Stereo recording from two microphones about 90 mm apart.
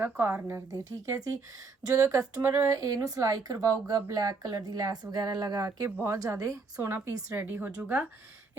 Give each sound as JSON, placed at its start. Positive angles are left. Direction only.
{"t": 0.0, "sound": "a woman's voice", "side_deg": -20}
{"t": 0.7, "sound": "speech", "side_deg": -40}
{"t": 7.3, "sound": "a woman's voice", "side_deg": -25}
{"t": 7.8, "sound": "speech", "side_deg": -10}